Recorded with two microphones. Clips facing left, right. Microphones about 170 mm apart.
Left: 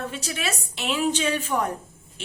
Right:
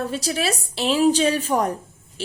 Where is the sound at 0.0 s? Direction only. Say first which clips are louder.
Right 6 dB; 35° right (ahead or behind).